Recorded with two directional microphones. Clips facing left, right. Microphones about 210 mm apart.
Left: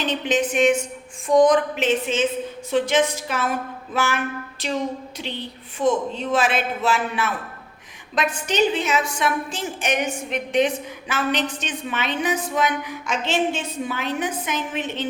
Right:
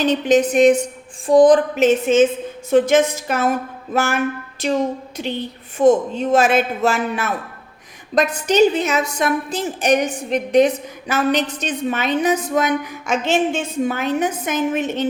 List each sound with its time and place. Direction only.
0.0 s a woman's voice: 40° right (ahead or behind)